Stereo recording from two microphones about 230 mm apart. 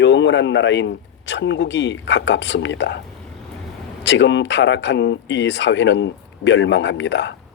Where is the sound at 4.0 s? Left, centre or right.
Left.